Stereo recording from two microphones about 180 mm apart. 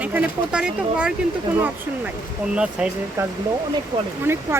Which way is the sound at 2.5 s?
5° right (ahead or behind).